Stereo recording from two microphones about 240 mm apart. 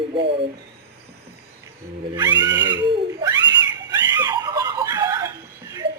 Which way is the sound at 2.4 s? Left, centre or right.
Right.